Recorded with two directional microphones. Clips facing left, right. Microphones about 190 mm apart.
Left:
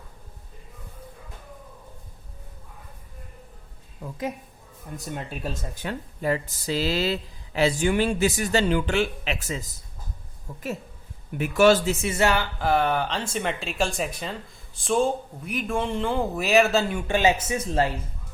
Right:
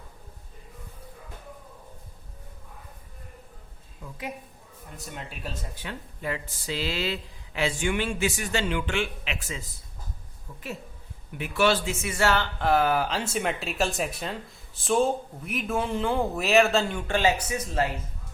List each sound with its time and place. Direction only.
5.7 s speech: 45° left (ahead or behind)
11.3 s a man's voice: 45° left (ahead or behind)
12.0 s a woman's voice: 20° left (ahead or behind)
12.5 s speech: centre (ahead or behind)
17.1 s speech: 20° left (ahead or behind)